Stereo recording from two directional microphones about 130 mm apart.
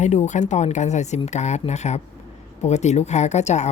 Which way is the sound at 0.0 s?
65° left (ahead or behind).